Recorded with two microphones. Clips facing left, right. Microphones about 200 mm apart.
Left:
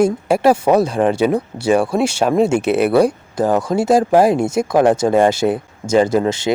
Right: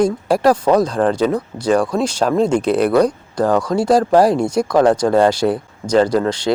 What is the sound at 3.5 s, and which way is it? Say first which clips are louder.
Speech: even; 25° left (ahead or behind).